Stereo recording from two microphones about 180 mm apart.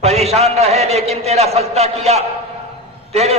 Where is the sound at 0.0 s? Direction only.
35° right (ahead or behind).